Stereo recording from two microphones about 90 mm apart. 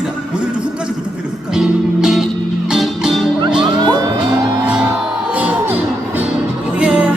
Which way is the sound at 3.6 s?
55° right (ahead or behind).